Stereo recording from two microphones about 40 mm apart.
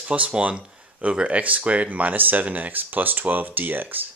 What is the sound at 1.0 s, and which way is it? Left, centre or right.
Speech, right.